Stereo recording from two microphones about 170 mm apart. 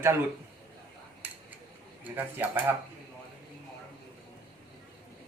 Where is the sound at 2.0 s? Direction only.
10° right (ahead or behind).